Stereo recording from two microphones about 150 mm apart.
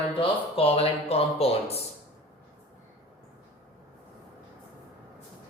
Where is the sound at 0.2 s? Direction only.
40° left (ahead or behind).